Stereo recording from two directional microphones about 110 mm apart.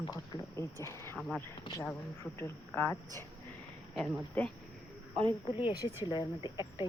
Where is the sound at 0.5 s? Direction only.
25° left (ahead or behind).